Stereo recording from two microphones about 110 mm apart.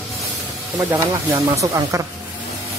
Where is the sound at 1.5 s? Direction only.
30° right (ahead or behind).